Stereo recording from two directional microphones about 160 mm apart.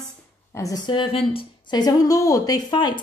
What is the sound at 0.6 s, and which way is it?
A woman's voice, 25° left (ahead or behind).